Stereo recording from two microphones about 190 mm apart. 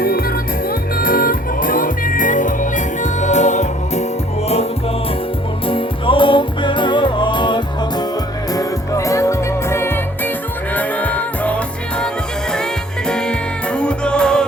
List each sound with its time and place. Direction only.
0.0 s music: 55° left (ahead or behind)
5.6 s music: 25° left (ahead or behind); by 12.0 s 5° left (ahead or behind)
13.1 s music: 5° left (ahead or behind)